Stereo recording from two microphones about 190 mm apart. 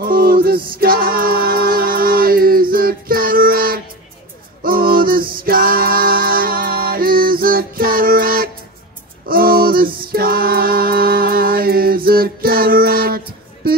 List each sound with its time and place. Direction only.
0.0 s music: 50° right (ahead or behind)
0.7 s a capella: 50° right (ahead or behind)
9.3 s music: 50° right (ahead or behind)